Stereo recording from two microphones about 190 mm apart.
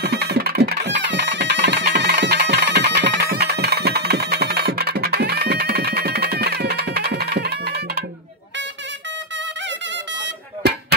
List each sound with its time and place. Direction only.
0.0 s music: 60° right (ahead or behind)